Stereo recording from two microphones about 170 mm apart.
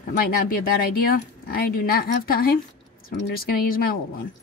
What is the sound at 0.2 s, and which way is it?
Speech, 60° left (ahead or behind).